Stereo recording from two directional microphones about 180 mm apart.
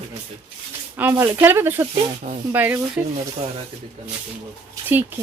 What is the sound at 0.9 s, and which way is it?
Speech, 10° right (ahead or behind).